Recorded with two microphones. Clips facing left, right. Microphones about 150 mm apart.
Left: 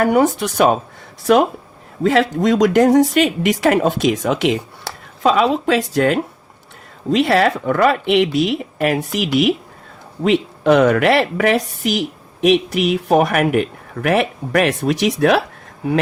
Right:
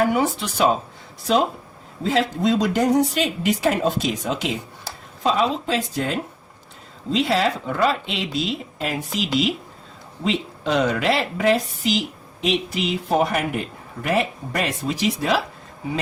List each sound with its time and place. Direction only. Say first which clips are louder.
0.0 s a woman's voice: left 6 dB; 55° left (ahead or behind)
2.0 s a woman's voice: left 5 dB; 65° left (ahead or behind)